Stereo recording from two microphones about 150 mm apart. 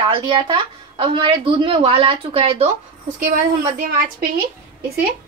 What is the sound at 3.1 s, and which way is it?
A woman's voice, 75° right (ahead or behind).